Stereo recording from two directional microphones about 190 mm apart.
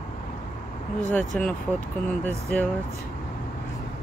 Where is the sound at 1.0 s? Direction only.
5° left (ahead or behind).